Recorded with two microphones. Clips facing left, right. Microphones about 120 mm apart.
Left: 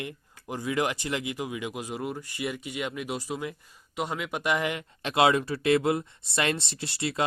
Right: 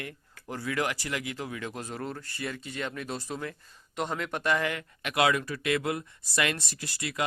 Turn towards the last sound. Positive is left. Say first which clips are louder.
# left 4 dB
turn(degrees=30)  # may be behind; listen again after turning